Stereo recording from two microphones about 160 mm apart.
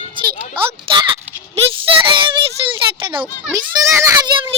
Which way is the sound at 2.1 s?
30° right (ahead or behind).